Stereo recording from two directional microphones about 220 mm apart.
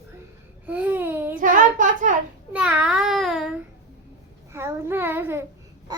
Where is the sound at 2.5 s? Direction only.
5° right (ahead or behind).